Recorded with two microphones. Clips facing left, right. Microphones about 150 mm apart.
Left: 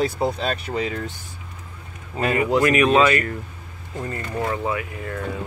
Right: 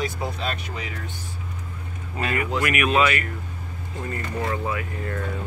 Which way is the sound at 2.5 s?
30° left (ahead or behind).